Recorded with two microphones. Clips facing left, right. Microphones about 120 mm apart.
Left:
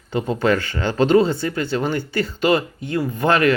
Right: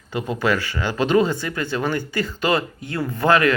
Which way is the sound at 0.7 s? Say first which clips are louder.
Left 4 dB; 40° left (ahead or behind).